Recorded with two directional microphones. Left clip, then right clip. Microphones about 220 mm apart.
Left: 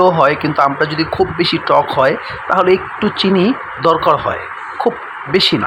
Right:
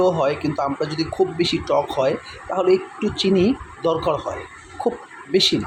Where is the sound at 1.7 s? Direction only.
30° left (ahead or behind).